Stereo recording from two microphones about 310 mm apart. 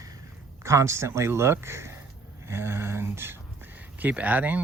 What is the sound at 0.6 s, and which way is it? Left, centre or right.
Speech, centre.